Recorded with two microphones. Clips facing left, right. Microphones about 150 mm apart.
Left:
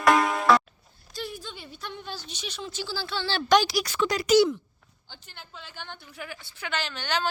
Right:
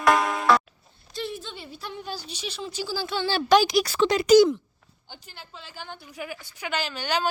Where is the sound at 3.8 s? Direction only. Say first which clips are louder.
Right 5 dB; 30° right (ahead or behind).